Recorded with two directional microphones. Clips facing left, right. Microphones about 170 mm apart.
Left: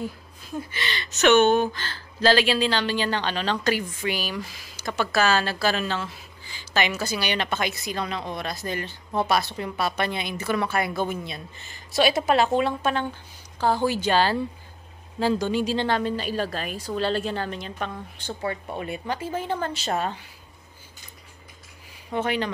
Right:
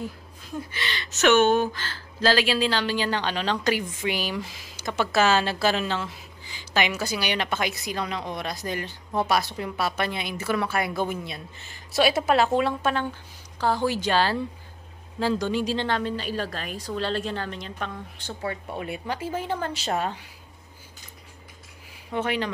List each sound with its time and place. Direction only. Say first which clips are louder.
0.7 s a woman's voice: left 1 dB; centre (ahead or behind)
22.1 s a woman's voice: left 1 dB; centre (ahead or behind)